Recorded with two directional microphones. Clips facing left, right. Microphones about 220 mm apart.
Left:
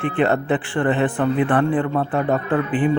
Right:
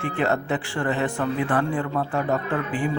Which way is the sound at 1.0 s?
55° left (ahead or behind).